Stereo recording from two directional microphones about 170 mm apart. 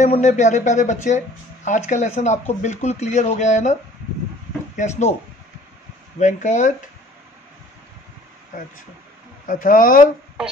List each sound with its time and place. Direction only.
0.0 s speech: 40° left (ahead or behind)
4.7 s speech: 40° left (ahead or behind)
6.1 s speech: 45° left (ahead or behind)
9.5 s speech: 55° left (ahead or behind)